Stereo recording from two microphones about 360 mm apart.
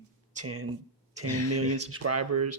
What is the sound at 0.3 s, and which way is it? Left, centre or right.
Speech, right.